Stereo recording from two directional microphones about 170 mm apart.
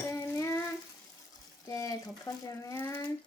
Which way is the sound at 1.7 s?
20° left (ahead or behind).